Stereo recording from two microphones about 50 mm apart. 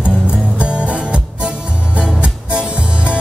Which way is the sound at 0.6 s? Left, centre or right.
Right.